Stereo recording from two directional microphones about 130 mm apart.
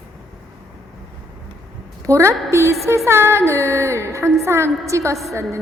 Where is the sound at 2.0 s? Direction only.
25° right (ahead or behind).